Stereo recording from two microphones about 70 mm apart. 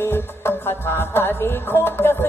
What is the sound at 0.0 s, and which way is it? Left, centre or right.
Music, left.